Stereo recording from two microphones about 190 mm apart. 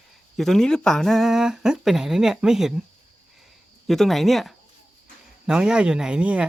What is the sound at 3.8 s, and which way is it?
Speech, centre (ahead or behind).